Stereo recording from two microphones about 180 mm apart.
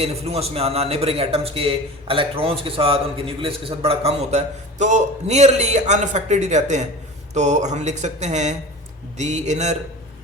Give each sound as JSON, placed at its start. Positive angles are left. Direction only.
{"t": 0.0, "sound": "a man's voice", "side_deg": -35}